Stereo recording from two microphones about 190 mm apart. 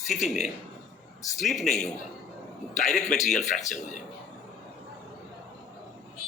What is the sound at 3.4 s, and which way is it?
Speech, 40° left (ahead or behind).